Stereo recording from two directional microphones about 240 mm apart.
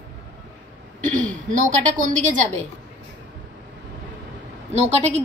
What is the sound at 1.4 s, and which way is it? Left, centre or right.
Speech, right.